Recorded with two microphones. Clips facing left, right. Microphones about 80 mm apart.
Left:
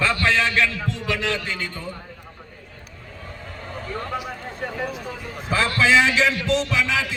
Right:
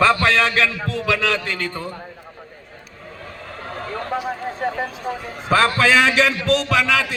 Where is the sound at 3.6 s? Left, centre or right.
Right.